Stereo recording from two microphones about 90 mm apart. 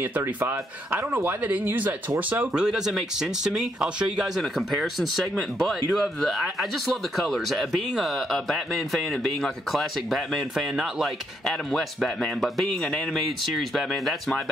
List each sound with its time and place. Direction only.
0.2 s speech: 25° right (ahead or behind)
2.5 s speech: 5° right (ahead or behind)